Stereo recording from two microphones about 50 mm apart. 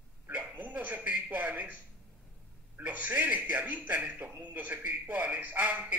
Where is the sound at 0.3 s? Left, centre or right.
Right.